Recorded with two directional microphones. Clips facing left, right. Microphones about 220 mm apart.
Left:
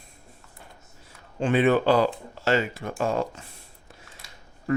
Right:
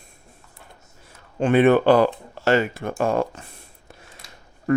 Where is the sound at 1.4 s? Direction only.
55° right (ahead or behind).